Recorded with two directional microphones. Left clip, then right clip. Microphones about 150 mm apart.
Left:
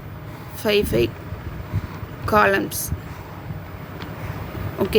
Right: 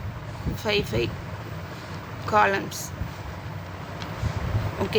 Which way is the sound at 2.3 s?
50° left (ahead or behind).